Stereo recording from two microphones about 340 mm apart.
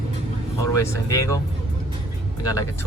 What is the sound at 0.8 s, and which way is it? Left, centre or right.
Speech, centre.